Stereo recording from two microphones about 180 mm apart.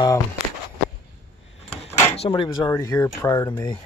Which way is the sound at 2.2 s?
25° left (ahead or behind).